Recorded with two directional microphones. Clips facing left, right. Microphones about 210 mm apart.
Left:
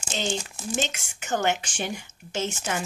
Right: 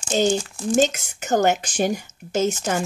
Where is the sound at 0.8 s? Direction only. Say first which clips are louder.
Right 13 dB; 40° right (ahead or behind).